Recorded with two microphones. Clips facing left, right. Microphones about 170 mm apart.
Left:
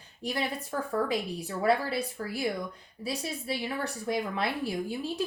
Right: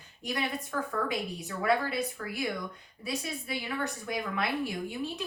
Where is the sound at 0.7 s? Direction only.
30° left (ahead or behind).